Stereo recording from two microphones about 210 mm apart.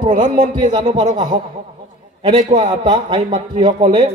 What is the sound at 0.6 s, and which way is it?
Speech, 20° right (ahead or behind).